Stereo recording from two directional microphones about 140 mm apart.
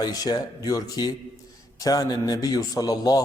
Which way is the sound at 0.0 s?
30° left (ahead or behind).